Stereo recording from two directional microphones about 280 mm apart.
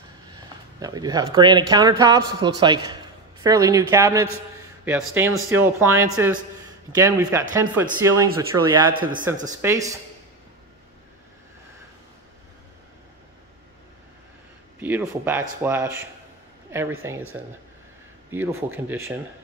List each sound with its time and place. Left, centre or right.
0.7 s a man's voice: centre
8.9 s a man's voice: right
9.5 s a man's voice: centre
14.8 s a man's voice: centre